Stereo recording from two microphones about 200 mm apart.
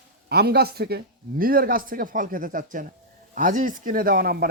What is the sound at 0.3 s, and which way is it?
A man's voice, 55° right (ahead or behind).